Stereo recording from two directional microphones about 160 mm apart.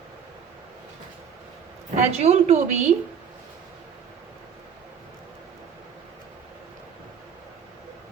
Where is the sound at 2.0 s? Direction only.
45° right (ahead or behind).